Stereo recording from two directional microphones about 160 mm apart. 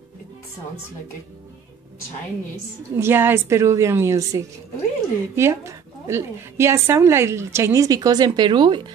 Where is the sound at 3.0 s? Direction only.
15° right (ahead or behind).